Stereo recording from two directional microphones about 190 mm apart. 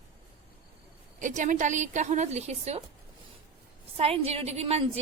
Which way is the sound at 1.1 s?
40° right (ahead or behind).